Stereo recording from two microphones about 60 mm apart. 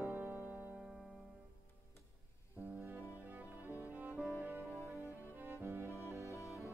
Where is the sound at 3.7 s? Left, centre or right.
Right.